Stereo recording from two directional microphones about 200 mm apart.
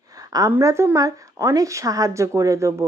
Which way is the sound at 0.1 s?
15° right (ahead or behind).